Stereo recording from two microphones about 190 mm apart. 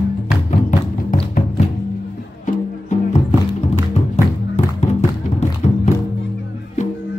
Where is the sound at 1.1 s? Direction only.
45° left (ahead or behind).